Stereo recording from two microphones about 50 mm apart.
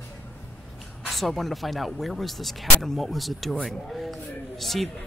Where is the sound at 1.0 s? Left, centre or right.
Centre.